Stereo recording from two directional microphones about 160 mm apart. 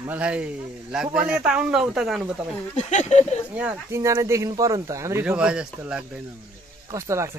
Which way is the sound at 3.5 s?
15° right (ahead or behind).